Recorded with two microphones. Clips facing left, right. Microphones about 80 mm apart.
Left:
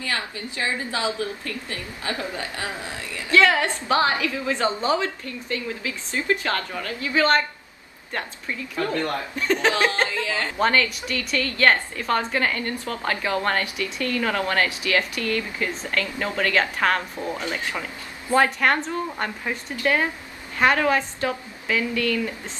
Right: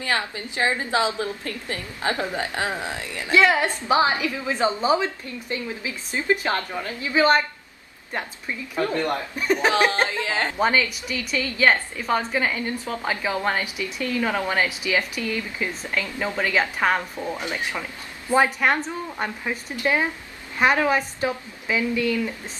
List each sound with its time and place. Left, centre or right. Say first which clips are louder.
0.1 s a woman's voice: right 5 dB; right
10.6 s a woman's voice: left 2 dB; centre